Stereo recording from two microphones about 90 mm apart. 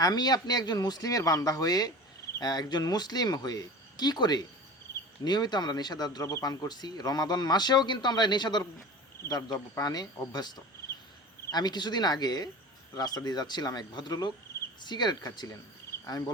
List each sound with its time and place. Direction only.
0.0 s speech: 50° left (ahead or behind)
9.2 s speech: 45° left (ahead or behind)